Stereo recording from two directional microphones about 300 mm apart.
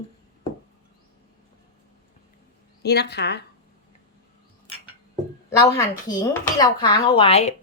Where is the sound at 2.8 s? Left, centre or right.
Left.